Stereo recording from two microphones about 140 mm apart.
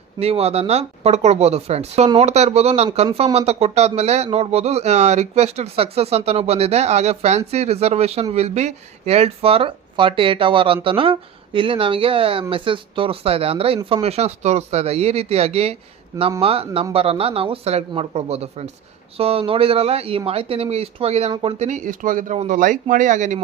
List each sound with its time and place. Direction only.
0.2 s speech: 45° right (ahead or behind)